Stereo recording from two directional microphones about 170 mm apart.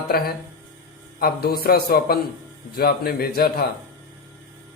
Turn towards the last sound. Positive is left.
turn(degrees=65)  # may be behind; listen again after turning